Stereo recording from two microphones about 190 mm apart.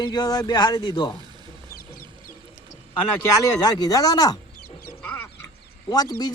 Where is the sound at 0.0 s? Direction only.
20° left (ahead or behind).